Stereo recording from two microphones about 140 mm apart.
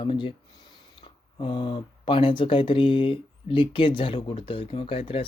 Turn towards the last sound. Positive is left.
turn(degrees=40)  # may be behind; listen again after turning